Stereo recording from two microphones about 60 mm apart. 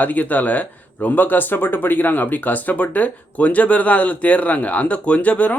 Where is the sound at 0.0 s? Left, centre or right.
Left.